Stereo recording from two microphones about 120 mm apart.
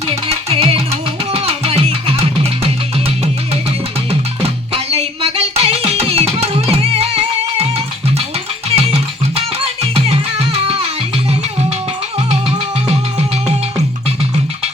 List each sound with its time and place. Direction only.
0.1 s music: 55° right (ahead or behind)
4.1 s music: 55° right (ahead or behind)
8.7 s music: 55° right (ahead or behind)
12.3 s music: 60° right (ahead or behind)